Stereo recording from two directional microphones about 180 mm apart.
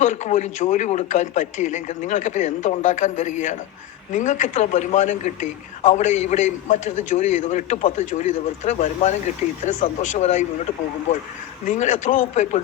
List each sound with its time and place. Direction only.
0.0 s a man's voice: 40° left (ahead or behind)
11.8 s a man's voice: 40° left (ahead or behind)